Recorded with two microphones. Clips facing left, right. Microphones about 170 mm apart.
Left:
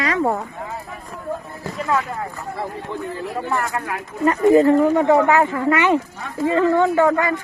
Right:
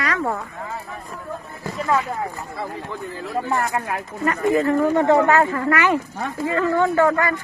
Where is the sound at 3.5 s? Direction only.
25° right (ahead or behind).